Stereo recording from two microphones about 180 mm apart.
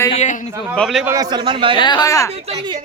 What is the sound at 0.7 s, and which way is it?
Speech, centre (ahead or behind).